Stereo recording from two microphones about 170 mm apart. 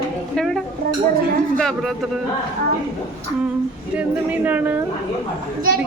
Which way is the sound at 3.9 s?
10° right (ahead or behind).